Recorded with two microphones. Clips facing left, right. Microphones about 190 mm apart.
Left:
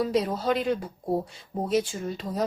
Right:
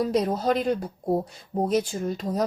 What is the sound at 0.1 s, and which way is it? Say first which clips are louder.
Speech: right 2 dB; 45° right (ahead or behind).